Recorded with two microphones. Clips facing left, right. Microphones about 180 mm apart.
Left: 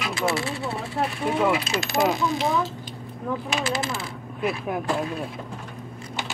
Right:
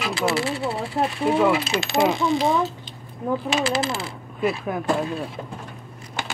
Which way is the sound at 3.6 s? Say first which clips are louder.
Right 3 dB; 35° right (ahead or behind).